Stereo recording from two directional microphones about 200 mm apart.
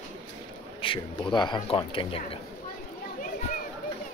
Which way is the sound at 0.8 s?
25° left (ahead or behind).